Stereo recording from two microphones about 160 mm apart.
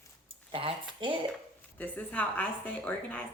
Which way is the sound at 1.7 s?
10° left (ahead or behind).